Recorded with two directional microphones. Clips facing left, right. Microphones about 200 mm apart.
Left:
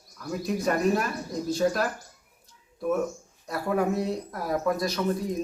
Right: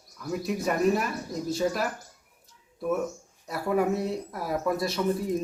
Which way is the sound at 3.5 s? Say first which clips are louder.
Even; 5° right (ahead or behind).